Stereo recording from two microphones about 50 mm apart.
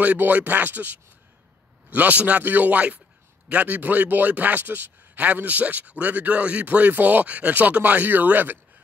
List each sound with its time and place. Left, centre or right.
0.0 s speech: right